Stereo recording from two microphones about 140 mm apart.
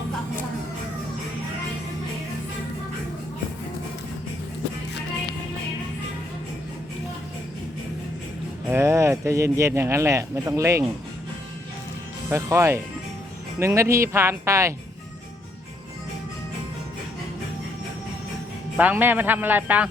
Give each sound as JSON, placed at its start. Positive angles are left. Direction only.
{"t": 8.7, "sound": "speech", "side_deg": -20}
{"t": 12.3, "sound": "speech", "side_deg": -20}
{"t": 18.8, "sound": "a man's voice", "side_deg": -10}